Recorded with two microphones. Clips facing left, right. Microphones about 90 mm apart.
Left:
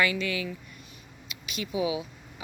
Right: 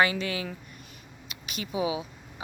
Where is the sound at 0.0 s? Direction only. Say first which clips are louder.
Right 2 dB; 35° right (ahead or behind).